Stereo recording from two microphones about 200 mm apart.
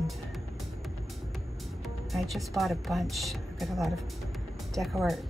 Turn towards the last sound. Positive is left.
turn(degrees=0)  # may be behind; listen again after turning